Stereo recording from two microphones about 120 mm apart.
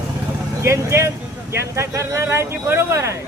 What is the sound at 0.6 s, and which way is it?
Speech, 25° right (ahead or behind).